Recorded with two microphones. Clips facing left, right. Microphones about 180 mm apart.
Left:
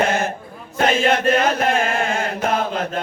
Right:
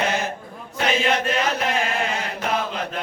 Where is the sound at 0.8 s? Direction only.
50° left (ahead or behind).